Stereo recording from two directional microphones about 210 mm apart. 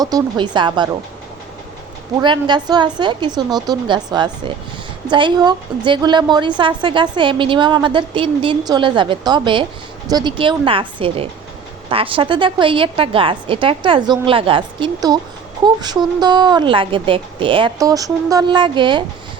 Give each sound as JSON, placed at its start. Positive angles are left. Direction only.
{"t": 0.0, "sound": "a woman's voice", "side_deg": -20}
{"t": 2.2, "sound": "a woman's voice", "side_deg": -20}